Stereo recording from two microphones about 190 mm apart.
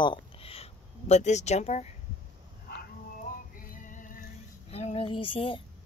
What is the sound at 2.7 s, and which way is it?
Dog, 50° left (ahead or behind).